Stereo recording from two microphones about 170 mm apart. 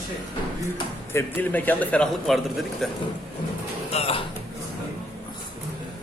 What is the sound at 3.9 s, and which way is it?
Speech, 35° left (ahead or behind).